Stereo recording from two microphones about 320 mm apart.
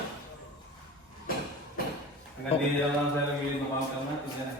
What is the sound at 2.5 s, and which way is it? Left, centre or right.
Speech, centre.